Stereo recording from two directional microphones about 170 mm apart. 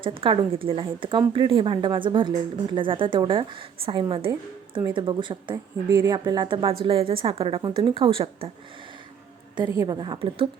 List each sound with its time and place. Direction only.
0.0 s a woman's voice: 30° right (ahead or behind)
5.9 s a woman's voice: 20° right (ahead or behind)
9.6 s speech: 20° right (ahead or behind)